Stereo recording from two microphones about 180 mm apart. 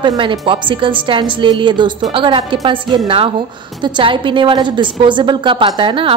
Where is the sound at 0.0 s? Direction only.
30° right (ahead or behind).